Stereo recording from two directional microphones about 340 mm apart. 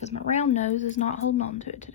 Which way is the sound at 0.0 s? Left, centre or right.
Centre.